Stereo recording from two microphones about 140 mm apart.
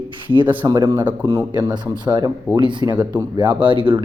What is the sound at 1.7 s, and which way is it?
Speech, 30° right (ahead or behind).